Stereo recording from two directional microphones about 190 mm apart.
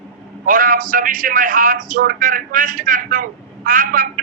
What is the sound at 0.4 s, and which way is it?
A man's voice, 45° right (ahead or behind).